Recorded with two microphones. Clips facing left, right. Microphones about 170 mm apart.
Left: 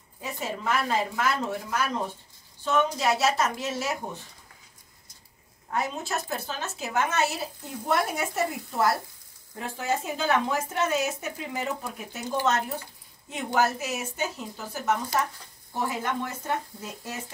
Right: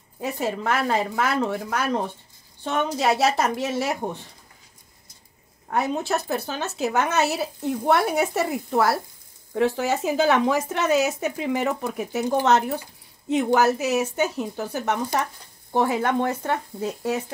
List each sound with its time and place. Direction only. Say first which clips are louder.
0.2 s speech: right 6 dB; 60° right (ahead or behind)
5.7 s speech: right 6 dB; 65° right (ahead or behind)